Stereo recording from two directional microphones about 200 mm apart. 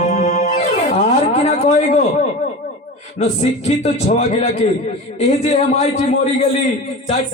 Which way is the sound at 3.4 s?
30° left (ahead or behind).